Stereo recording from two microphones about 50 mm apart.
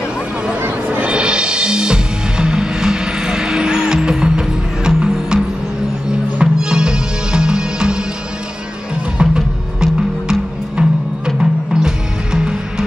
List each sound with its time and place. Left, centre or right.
0.8 s music: right
6.4 s music: centre
9.2 s music: centre